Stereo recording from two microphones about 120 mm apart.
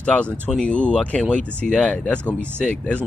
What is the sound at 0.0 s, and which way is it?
Speech, 10° left (ahead or behind).